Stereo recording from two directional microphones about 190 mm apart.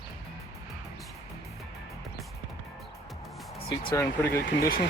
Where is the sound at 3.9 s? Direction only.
15° left (ahead or behind).